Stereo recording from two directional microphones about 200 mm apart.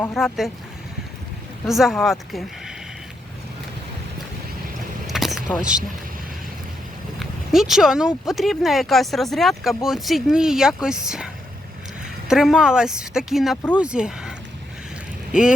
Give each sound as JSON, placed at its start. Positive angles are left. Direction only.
{"t": 0.2, "sound": "speech", "side_deg": 0}
{"t": 1.6, "sound": "speech", "side_deg": 0}
{"t": 5.0, "sound": "vehicle", "side_deg": 0}
{"t": 5.5, "sound": "speech", "side_deg": -5}
{"t": 7.2, "sound": "speech", "side_deg": 0}
{"t": 12.3, "sound": "speech", "side_deg": 0}